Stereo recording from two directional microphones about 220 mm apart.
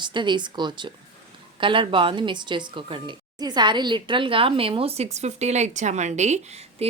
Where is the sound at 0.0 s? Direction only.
20° right (ahead or behind).